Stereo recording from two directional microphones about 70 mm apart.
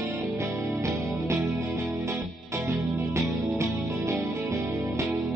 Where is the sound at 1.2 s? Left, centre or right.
Right.